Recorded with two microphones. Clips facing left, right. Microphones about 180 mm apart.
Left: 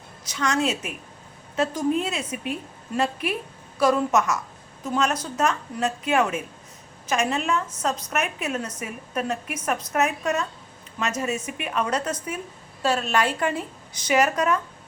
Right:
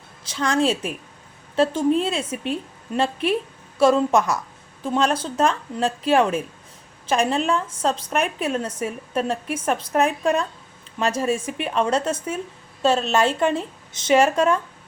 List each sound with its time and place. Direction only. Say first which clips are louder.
0.3 s a woman's voice: right 4 dB; 30° right (ahead or behind)